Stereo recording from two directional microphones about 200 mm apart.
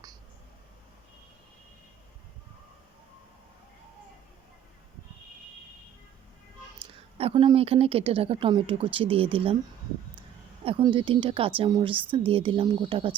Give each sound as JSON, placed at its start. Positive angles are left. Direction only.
{"t": 6.7, "sound": "speech", "side_deg": -25}
{"t": 10.6, "sound": "speech", "side_deg": -30}